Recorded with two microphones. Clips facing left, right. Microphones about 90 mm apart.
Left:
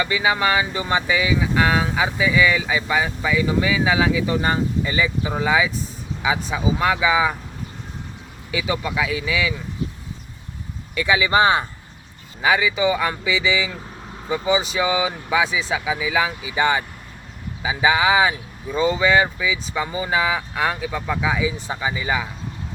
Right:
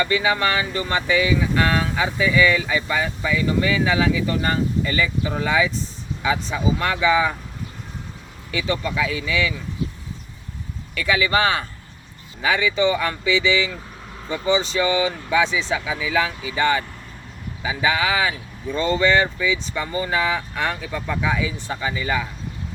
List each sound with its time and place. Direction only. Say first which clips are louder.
0.0 s speech: even; 15° left (ahead or behind)
8.5 s speech: even; 10° left (ahead or behind)
10.9 s speech: left 2 dB; 20° left (ahead or behind)
12.4 s speech: left 1 dB; 10° left (ahead or behind)
18.7 s speech: left 1 dB; 10° left (ahead or behind)